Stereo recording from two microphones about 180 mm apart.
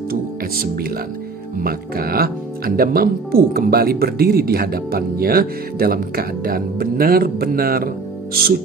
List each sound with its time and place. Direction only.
0.1 s speech: 55° right (ahead or behind)